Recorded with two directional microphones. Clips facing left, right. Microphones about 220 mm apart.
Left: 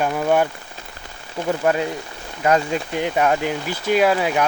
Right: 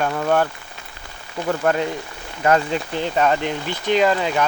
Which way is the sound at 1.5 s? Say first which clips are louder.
Even; 15° left (ahead or behind).